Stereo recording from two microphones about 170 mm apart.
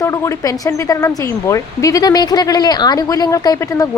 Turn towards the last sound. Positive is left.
turn(degrees=20)  # may be behind; listen again after turning